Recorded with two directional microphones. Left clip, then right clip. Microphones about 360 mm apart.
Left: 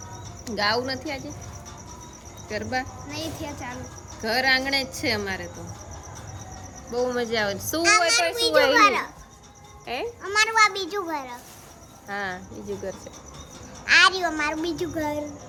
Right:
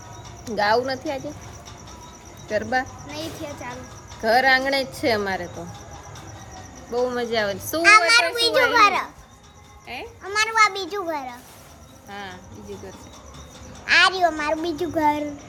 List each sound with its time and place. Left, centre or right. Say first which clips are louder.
0.4 s a child's voice: right 4 dB; centre
2.6 s speech: right 5 dB; centre
3.1 s a child's voice: right 1 dB; centre
4.2 s speech: right 5 dB; centre
6.9 s a child's voice: right 2 dB; centre
7.8 s speech: right 5 dB; centre
9.8 s a child's voice: left 4 dB; centre
10.2 s a child's voice: right 1 dB; centre
12.0 s speech: left 6 dB; centre
13.8 s a child's voice: right 1 dB; centre
14.9 s speech: right 11 dB; centre